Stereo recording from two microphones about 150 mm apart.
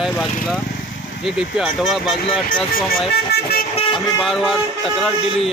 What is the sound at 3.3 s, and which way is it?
Vehicle, 90° left.